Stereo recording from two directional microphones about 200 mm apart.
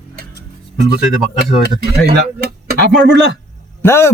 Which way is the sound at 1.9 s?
55° right (ahead or behind).